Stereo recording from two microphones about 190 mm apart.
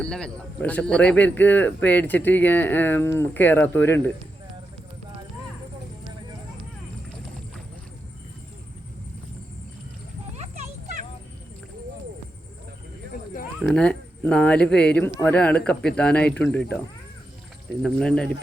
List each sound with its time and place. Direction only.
0.0 s speech: 5° left (ahead or behind)
10.3 s a sound: 35° right (ahead or behind)
13.6 s speech: 5° left (ahead or behind)
17.8 s speech: 5° left (ahead or behind)